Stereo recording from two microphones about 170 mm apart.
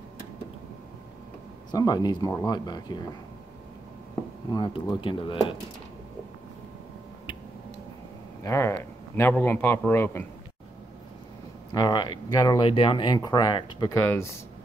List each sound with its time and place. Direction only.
1.7 s speech: 20° left (ahead or behind)
4.5 s speech: 25° left (ahead or behind)
8.5 s a man's voice: 15° left (ahead or behind)
11.7 s speech: 25° left (ahead or behind)